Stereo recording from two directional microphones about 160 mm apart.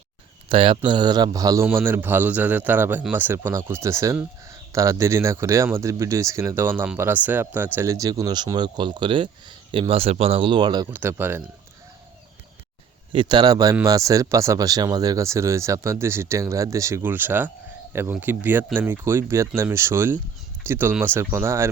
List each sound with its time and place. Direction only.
0.4 s a man's voice: 35° right (ahead or behind)
11.2 s a man's voice: 15° right (ahead or behind)
13.1 s a man's voice: 30° right (ahead or behind)